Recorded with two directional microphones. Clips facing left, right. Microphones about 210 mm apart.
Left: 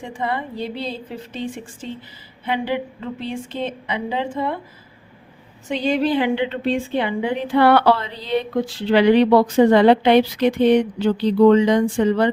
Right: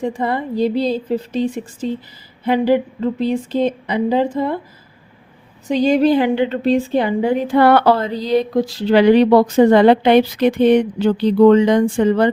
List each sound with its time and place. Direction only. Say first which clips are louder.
0.0 s a woman's voice: right 6 dB; 40° right (ahead or behind)
5.6 s a woman's voice: right 6 dB; 40° right (ahead or behind)